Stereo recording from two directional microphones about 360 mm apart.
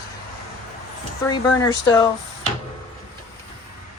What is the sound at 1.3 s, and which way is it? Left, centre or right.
Speech, centre.